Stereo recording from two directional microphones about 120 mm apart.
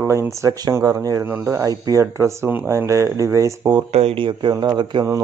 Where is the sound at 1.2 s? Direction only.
20° right (ahead or behind).